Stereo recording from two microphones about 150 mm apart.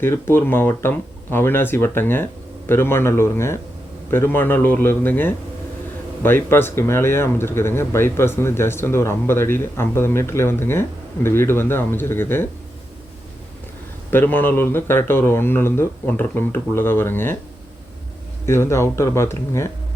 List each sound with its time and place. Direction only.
0.0 s speech: 15° left (ahead or behind)
14.1 s speech: 15° left (ahead or behind)
18.4 s speech: 15° left (ahead or behind)